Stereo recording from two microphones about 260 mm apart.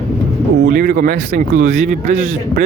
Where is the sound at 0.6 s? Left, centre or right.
Right.